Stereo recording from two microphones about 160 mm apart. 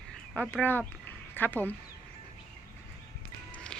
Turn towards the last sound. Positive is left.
turn(degrees=5)  # may be behind; listen again after turning